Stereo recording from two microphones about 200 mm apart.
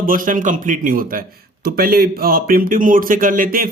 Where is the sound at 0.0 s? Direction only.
45° right (ahead or behind).